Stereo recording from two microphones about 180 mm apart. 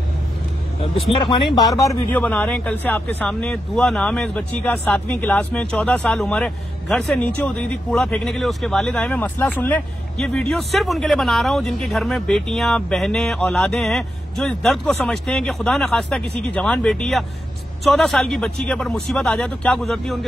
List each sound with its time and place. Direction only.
1.1 s speech: 25° left (ahead or behind)
1.8 s speech: 15° left (ahead or behind)